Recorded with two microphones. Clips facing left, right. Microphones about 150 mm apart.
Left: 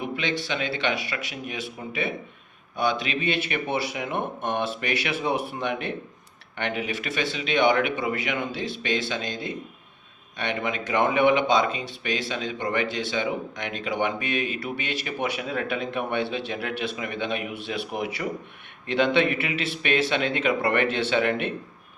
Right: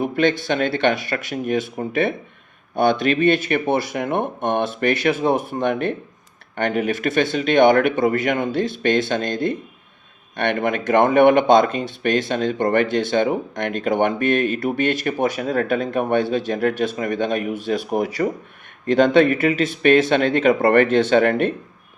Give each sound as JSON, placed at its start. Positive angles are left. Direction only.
{"t": 0.0, "sound": "speech", "side_deg": -50}